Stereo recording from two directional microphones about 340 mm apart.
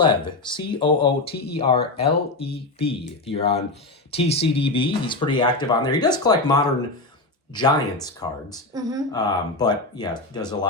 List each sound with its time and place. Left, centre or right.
0.3 s speech: centre
8.7 s speech: centre
9.1 s speech: centre